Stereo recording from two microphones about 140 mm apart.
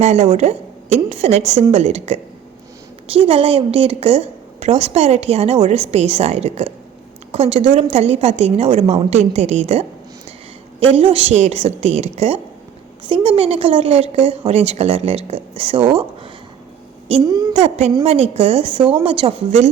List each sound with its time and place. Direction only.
0.0 s a woman's voice: 50° right (ahead or behind)
10.9 s a woman's voice: 40° right (ahead or behind)